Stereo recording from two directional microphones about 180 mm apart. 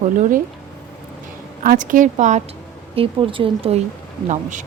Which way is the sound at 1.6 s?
50° right (ahead or behind).